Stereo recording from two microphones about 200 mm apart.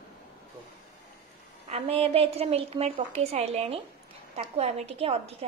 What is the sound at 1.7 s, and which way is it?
A woman's voice, 30° right (ahead or behind).